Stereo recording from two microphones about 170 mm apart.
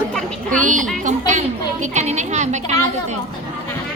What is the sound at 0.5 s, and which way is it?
A woman's voice, 50° right (ahead or behind).